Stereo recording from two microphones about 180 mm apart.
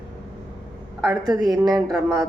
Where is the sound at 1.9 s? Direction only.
Centre (ahead or behind).